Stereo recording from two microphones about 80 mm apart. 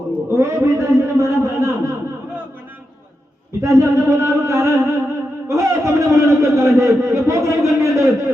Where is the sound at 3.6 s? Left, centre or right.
Right.